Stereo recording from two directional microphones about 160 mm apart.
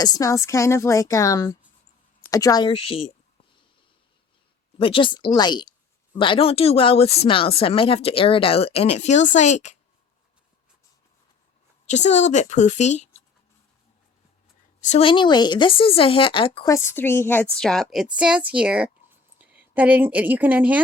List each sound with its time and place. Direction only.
0.0 s a woman's voice: 20° left (ahead or behind)
4.8 s a woman's voice: 35° left (ahead or behind)
11.9 s a woman's voice: 45° left (ahead or behind)
14.8 s a woman's voice: 50° left (ahead or behind)
15.0 s a woman's voice: 30° left (ahead or behind)
16.6 s a woman's voice: 15° left (ahead or behind); by 20.8 s 10° right (ahead or behind)